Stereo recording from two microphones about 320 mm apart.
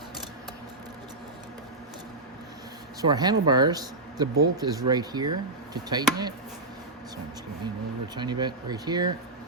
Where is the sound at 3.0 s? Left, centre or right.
Centre.